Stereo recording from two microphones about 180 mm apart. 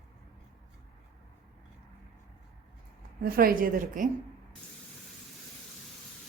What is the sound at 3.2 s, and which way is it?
Speech, 55° right (ahead or behind).